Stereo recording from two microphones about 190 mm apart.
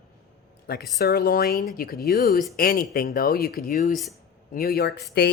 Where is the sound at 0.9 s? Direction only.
55° left (ahead or behind).